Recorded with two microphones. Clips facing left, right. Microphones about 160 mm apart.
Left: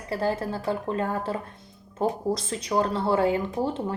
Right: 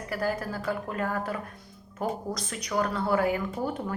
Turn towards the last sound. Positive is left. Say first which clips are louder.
# left 3 dB
turn(degrees=25)  # may be behind; listen again after turning